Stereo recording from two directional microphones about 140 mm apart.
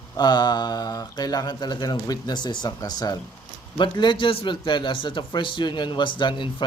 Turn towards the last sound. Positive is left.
turn(degrees=35)  # may be behind; listen again after turning